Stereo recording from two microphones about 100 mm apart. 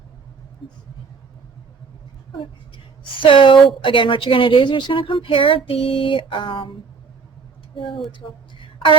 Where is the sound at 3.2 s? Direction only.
60° left (ahead or behind).